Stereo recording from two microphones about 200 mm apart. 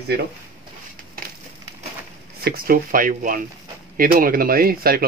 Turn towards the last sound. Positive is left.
turn(degrees=-50)  # may be behind; listen again after turning